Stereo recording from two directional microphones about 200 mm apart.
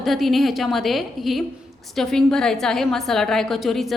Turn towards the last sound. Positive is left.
turn(degrees=0)  # may be behind; listen again after turning